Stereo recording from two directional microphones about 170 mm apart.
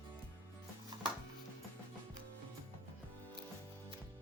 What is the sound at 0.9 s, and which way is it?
Music, 30° right (ahead or behind).